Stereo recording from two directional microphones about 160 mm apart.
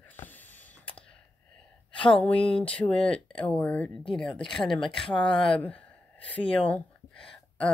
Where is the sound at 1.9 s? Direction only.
30° left (ahead or behind).